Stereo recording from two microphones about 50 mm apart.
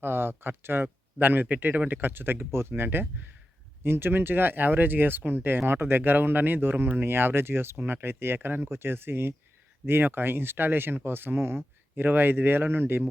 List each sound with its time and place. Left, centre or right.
0.0 s speech: right